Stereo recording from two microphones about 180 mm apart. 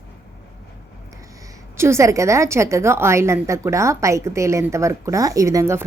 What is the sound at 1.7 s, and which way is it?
A woman's voice, 15° right (ahead or behind).